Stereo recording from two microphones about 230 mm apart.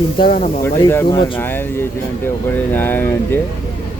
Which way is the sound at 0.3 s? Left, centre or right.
Left.